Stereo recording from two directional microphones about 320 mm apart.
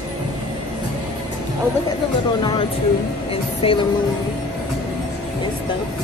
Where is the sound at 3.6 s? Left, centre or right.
Centre.